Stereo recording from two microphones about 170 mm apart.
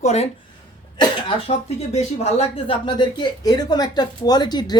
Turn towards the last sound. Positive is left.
turn(degrees=25)  # may be behind; listen again after turning